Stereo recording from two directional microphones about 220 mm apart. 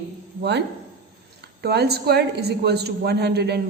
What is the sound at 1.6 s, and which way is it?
A woman's voice, 45° right (ahead or behind).